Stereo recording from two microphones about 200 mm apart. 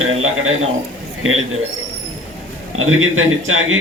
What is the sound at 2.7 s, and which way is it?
Speech, 90° right.